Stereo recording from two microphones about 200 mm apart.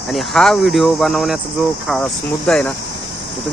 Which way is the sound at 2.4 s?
5° left (ahead or behind).